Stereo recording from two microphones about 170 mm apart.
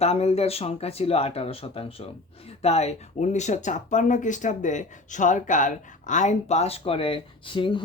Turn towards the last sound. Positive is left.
turn(degrees=30)  # may be behind; listen again after turning